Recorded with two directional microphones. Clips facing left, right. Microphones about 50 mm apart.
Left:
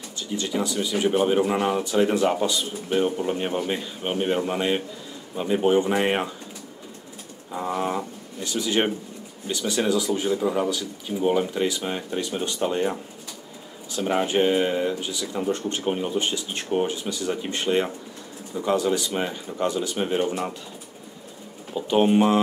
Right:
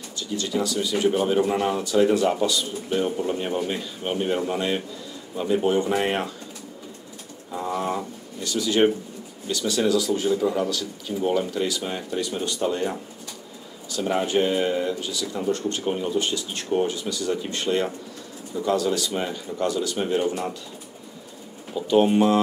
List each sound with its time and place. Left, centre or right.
0.1 s speech: left
7.5 s a sound: centre
8.5 s speech: left
21.7 s speech: centre